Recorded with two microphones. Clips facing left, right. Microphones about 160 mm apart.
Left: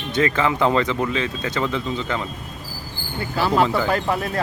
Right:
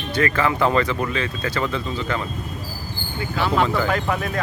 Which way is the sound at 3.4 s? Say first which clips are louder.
Left 2 dB; 35° left (ahead or behind).